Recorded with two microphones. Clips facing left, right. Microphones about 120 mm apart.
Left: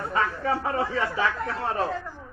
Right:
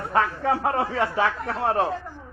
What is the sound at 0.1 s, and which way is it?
A man's voice, 65° right (ahead or behind).